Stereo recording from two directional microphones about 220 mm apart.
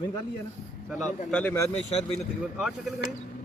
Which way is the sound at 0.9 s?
Centre (ahead or behind).